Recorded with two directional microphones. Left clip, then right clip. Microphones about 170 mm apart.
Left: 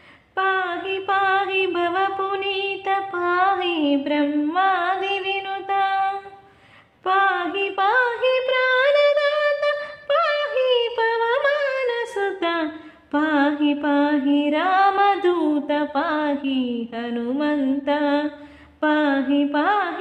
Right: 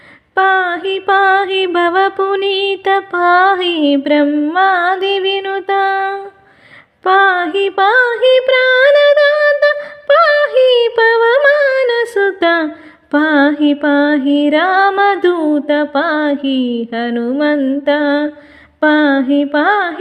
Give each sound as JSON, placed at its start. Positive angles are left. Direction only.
{"t": 0.3, "sound": "music", "side_deg": -50}
{"t": 7.0, "sound": "a sound", "side_deg": -50}
{"t": 11.4, "sound": "yodeling", "side_deg": -50}
{"t": 13.1, "sound": "music", "side_deg": -50}